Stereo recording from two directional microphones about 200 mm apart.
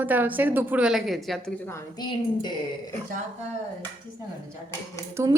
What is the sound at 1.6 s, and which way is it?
Speech, 15° left (ahead or behind).